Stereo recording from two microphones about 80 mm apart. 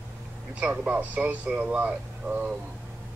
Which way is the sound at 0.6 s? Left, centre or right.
Centre.